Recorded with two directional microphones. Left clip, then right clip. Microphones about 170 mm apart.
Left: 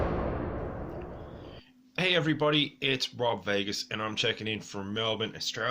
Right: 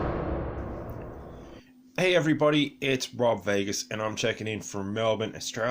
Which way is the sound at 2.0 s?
35° right (ahead or behind).